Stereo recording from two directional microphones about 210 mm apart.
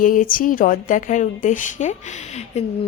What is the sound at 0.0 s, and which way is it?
A woman's voice, 40° left (ahead or behind).